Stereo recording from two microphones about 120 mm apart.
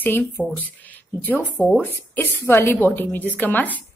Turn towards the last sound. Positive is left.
turn(degrees=15)  # may be behind; listen again after turning